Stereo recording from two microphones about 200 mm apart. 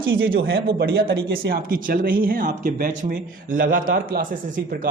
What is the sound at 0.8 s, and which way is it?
Speech, 60° right (ahead or behind).